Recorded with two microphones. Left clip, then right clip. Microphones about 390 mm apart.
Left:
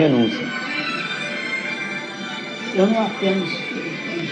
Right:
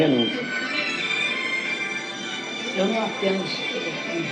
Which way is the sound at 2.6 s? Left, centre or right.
Centre.